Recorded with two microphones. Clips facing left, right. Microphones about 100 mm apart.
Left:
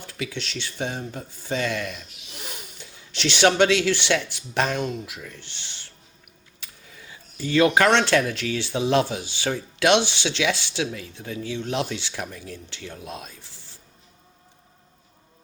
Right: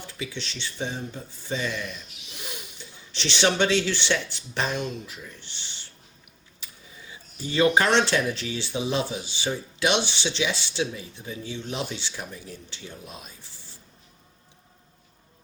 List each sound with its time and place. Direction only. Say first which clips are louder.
0.1 s speech: left 5 dB; 60° left (ahead or behind)
3.2 s speech: left 5 dB; 55° left (ahead or behind); by 5.5 s 75° left (ahead or behind)
7.4 s speech: left 3 dB; 60° left (ahead or behind); by 13.3 s 80° left